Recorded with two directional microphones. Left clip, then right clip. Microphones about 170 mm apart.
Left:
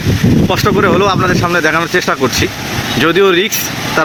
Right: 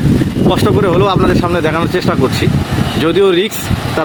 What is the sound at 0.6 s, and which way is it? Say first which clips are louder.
Speech: left 2 dB; 5° right (ahead or behind).